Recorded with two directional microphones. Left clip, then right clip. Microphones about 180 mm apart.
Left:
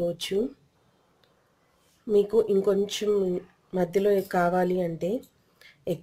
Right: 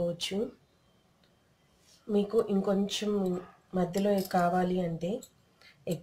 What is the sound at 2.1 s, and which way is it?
Speech, 50° left (ahead or behind).